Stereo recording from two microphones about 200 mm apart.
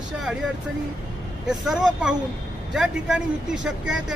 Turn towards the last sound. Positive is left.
turn(degrees=-5)  # may be behind; listen again after turning